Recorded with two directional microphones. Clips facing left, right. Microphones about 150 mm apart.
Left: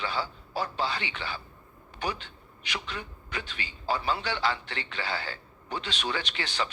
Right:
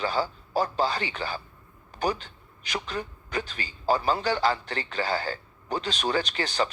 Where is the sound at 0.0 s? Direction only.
40° right (ahead or behind).